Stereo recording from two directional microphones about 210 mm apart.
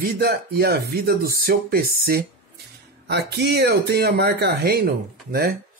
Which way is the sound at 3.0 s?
50° right (ahead or behind).